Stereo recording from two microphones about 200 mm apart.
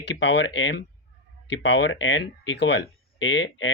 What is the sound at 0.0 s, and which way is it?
Speech, 60° left (ahead or behind).